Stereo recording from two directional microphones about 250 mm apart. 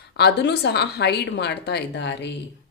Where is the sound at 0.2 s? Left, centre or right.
Left.